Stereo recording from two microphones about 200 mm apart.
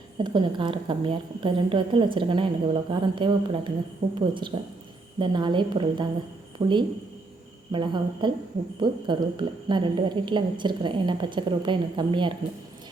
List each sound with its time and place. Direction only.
0.2 s a woman's voice: 25° right (ahead or behind)